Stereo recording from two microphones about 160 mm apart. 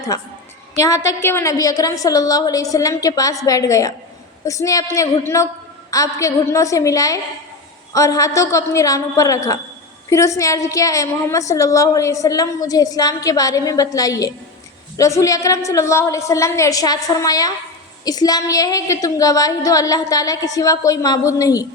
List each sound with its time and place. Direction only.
0.1 s a woman's voice: 20° left (ahead or behind)